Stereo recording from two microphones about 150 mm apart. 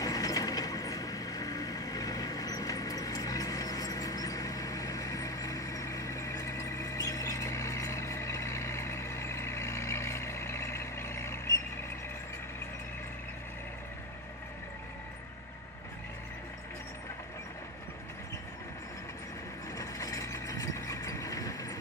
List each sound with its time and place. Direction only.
0.0 s mechanisms: 25° left (ahead or behind)
19.8 s vehicle: 20° left (ahead or behind)